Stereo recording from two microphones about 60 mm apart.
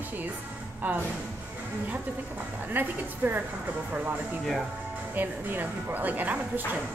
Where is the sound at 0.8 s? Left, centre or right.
Right.